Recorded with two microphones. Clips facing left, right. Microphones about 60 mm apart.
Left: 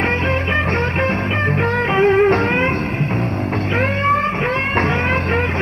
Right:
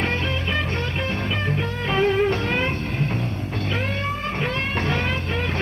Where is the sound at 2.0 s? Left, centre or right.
Left.